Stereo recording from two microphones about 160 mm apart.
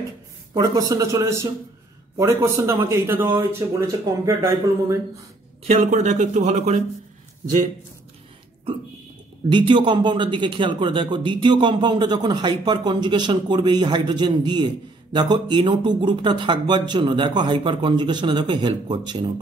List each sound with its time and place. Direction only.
0.6 s a man's voice: 20° right (ahead or behind)
5.6 s speech: 45° right (ahead or behind)
9.5 s a man's voice: 30° right (ahead or behind)